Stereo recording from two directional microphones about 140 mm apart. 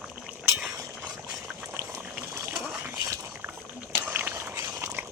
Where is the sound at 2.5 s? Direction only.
5° right (ahead or behind).